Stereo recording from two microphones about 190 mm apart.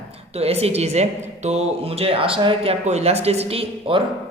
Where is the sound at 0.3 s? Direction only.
35° right (ahead or behind).